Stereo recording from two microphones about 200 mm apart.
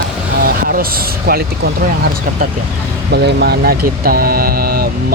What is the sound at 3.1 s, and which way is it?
Speech, 55° right (ahead or behind).